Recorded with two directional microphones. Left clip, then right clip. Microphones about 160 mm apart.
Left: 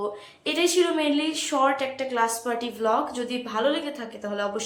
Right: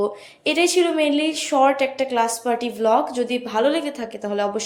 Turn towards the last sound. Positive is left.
turn(degrees=-25)  # may be behind; listen again after turning